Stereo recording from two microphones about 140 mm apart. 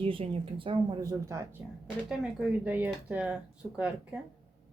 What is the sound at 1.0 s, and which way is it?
Speech, 20° right (ahead or behind).